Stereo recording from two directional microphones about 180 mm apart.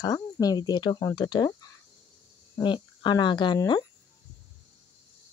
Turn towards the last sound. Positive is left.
turn(degrees=25)  # may be behind; listen again after turning